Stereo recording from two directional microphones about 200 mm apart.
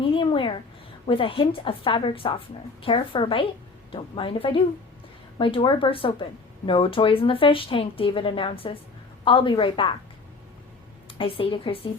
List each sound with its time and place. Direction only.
0.0 s a sound: 25° left (ahead or behind)
1.0 s speech: 25° left (ahead or behind)
11.2 s speech: 25° left (ahead or behind)